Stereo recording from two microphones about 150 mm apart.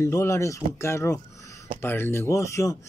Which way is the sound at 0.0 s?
20° left (ahead or behind).